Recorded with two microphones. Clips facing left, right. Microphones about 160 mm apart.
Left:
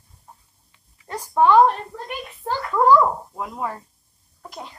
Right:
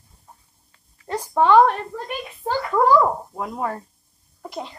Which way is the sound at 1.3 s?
70° right (ahead or behind).